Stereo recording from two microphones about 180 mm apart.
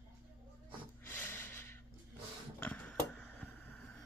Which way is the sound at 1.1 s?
15° left (ahead or behind).